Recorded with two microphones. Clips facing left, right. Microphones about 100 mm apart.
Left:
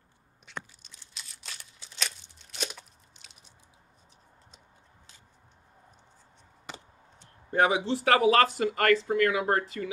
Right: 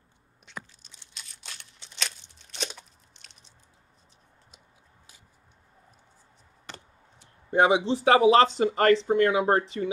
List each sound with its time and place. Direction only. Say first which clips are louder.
0.5 s a sound: left 1 dB; centre (ahead or behind)
2.3 s crunch: right 1 dB; 5° left (ahead or behind)
7.5 s speech: right 3 dB; 20° right (ahead or behind)